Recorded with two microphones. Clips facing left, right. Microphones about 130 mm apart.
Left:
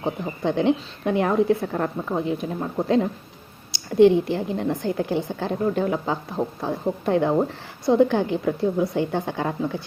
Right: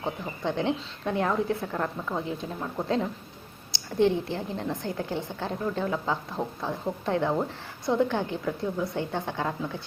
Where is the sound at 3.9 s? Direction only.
70° left (ahead or behind).